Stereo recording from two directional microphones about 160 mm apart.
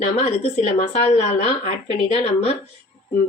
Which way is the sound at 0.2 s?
45° left (ahead or behind).